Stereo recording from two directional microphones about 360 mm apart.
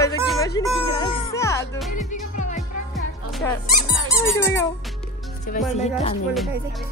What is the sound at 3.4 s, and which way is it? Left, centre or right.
Speech, centre.